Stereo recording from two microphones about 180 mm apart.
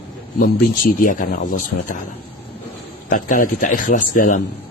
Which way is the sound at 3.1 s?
45° left (ahead or behind).